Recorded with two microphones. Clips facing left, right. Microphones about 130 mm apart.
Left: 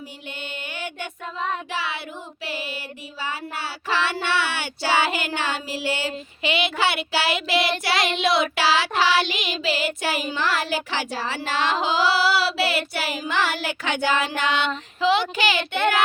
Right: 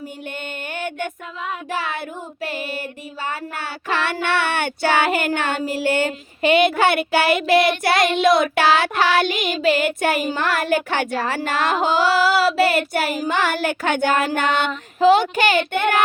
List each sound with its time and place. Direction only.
0.7 s music: 50° right (ahead or behind)
1.7 s child singing: 50° right (ahead or behind)